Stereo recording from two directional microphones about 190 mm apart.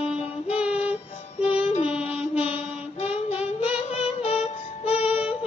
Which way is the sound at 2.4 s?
30° left (ahead or behind).